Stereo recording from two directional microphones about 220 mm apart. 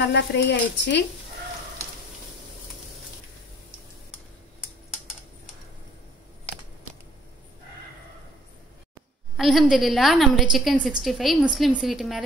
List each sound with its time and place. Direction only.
0.0 s speech: 50° left (ahead or behind)
9.4 s a woman's voice: centre (ahead or behind)